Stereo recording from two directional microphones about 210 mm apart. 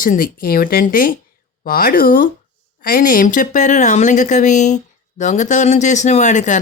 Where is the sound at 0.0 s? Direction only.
40° left (ahead or behind).